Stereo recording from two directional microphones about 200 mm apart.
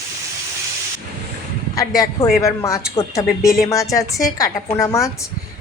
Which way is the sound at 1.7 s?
15° left (ahead or behind).